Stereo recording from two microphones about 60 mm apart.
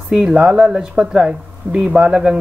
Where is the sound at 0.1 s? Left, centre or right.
Centre.